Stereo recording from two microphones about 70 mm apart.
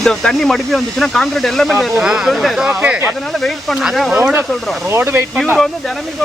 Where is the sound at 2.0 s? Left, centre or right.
Centre.